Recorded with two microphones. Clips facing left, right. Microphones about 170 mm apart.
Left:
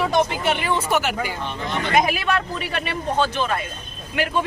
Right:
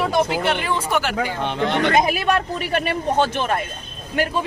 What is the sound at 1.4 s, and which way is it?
Speech, 70° right (ahead or behind).